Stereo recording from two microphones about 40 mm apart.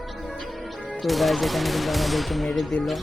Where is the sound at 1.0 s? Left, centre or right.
Centre.